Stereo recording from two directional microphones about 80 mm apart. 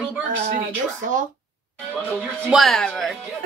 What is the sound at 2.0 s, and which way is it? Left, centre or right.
Speech, centre.